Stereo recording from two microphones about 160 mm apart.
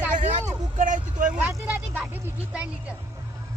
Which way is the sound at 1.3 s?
10° right (ahead or behind).